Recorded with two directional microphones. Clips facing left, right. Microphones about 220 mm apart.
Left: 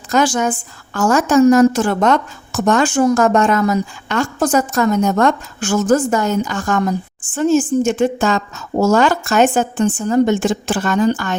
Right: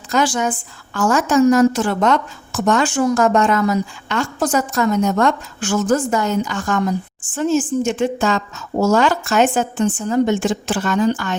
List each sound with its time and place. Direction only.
0.1 s a woman's voice: 45° left (ahead or behind)